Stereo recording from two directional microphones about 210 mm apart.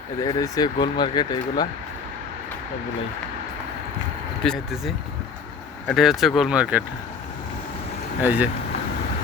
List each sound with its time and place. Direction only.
0.2 s speech: 15° left (ahead or behind)
4.4 s speech: centre (ahead or behind)
5.9 s speech: centre (ahead or behind)
8.2 s speech: 5° right (ahead or behind)